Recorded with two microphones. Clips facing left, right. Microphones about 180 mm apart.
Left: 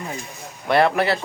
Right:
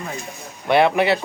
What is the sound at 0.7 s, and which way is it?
Speech, centre (ahead or behind).